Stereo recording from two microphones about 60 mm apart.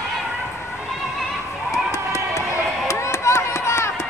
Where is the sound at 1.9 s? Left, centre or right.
Left.